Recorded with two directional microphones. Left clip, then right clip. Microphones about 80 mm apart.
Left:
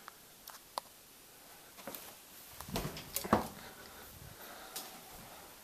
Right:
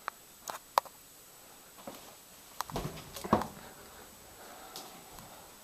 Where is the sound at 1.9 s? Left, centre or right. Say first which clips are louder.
Right 1 dB; left.